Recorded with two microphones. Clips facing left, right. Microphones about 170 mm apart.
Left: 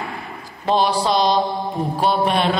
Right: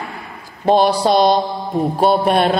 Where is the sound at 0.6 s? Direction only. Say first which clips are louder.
Right 5 dB; 50° right (ahead or behind).